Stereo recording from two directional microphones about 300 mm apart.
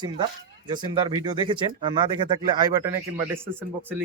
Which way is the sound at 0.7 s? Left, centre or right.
Centre.